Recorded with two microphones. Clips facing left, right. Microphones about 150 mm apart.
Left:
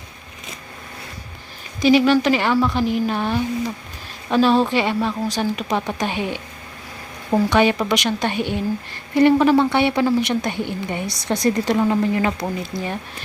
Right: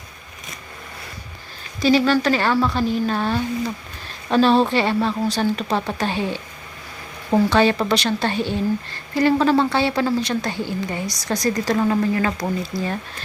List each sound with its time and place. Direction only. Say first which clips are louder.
1.8 s speech: left 2 dB; 15° left (ahead or behind)
7.5 s a woman's voice: even; 15° left (ahead or behind)